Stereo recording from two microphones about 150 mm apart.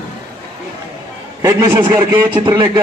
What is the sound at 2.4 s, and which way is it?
Speech, 30° right (ahead or behind).